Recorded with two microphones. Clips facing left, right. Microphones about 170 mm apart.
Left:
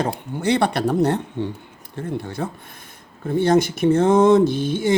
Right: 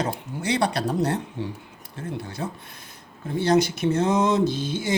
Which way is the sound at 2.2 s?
55° left (ahead or behind).